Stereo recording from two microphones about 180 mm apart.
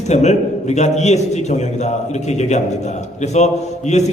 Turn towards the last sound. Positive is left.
turn(degrees=40)  # may be behind; listen again after turning